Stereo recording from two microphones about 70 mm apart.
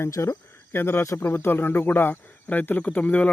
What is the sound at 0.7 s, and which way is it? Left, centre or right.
A man's voice, left.